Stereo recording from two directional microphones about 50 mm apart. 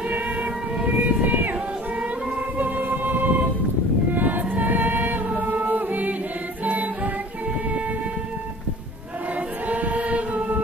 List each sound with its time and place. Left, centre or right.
0.8 s a sound: right
2.5 s music: right
4.1 s choir: right
6.6 s music: right
9.7 s choir: right